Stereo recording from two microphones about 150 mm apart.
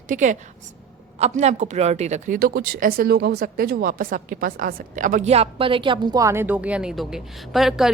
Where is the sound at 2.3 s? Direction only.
80° right.